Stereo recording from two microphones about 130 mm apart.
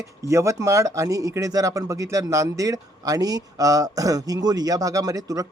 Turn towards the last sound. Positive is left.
turn(degrees=-25)  # may be behind; listen again after turning